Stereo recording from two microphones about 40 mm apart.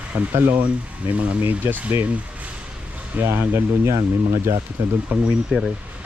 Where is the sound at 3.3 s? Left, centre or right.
Right.